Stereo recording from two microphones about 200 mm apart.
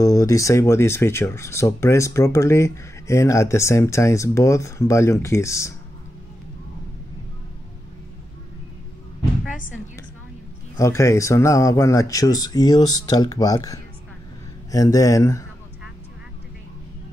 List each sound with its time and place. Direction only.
0.0 s speech: 15° left (ahead or behind)
10.8 s speech: 15° left (ahead or behind)